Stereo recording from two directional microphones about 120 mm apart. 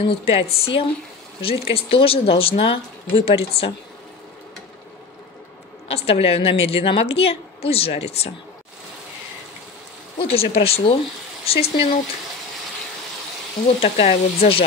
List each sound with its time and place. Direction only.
0.0 s speech: 50° left (ahead or behind)
5.9 s a woman's voice: 55° left (ahead or behind)
10.1 s a woman's voice: 55° left (ahead or behind)
13.7 s a woman's voice: 60° left (ahead or behind)